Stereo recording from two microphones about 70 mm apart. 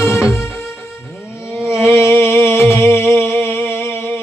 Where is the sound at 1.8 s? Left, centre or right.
Left.